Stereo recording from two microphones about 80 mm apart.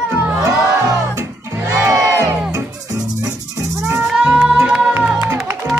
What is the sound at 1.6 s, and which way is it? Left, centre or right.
Crowd, right.